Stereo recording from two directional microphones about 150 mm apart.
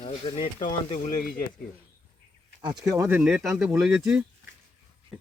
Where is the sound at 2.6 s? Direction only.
25° right (ahead or behind).